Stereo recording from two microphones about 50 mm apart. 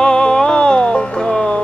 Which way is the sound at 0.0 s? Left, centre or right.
Centre.